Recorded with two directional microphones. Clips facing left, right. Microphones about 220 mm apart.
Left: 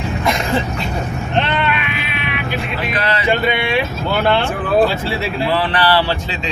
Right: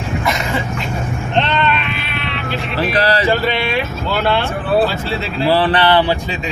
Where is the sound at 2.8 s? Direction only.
35° right (ahead or behind).